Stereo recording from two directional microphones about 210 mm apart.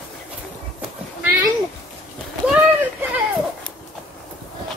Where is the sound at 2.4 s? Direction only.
5° right (ahead or behind).